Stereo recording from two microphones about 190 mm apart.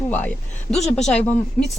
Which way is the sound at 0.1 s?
10° left (ahead or behind).